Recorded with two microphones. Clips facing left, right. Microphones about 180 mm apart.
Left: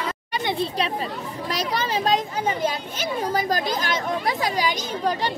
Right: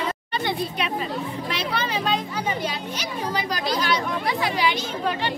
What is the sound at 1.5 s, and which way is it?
A child's voice, 40° left (ahead or behind).